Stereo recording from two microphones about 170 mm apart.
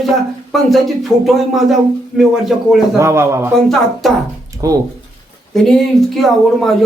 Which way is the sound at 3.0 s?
15° right (ahead or behind).